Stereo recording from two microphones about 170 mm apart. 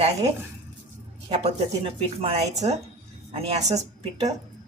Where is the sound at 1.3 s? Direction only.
35° right (ahead or behind).